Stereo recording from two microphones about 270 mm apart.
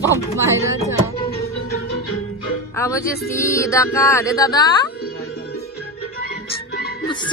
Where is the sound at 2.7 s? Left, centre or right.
Centre.